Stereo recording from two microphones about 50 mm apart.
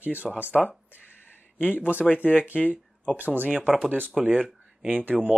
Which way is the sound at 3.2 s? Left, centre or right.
Right.